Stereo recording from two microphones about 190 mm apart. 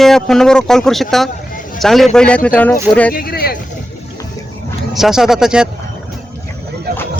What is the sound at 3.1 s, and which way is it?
Speech, 50° left (ahead or behind).